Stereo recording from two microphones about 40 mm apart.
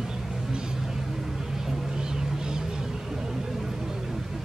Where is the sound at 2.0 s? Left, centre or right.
Centre.